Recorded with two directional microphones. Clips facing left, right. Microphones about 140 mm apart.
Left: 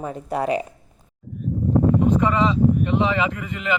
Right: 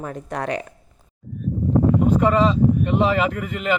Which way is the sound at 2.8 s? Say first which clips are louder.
Right 2 dB; 45° right (ahead or behind).